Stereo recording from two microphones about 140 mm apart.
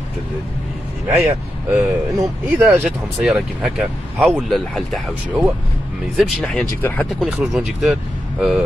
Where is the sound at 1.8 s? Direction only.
20° right (ahead or behind).